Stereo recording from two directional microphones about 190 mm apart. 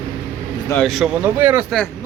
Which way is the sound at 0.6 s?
5° left (ahead or behind).